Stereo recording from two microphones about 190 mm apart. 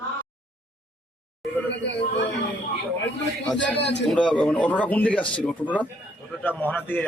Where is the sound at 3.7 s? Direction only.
65° left (ahead or behind).